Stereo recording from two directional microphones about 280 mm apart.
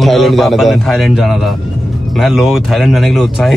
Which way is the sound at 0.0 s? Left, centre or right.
Centre.